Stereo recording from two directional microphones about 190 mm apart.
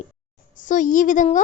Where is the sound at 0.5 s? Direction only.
45° left (ahead or behind).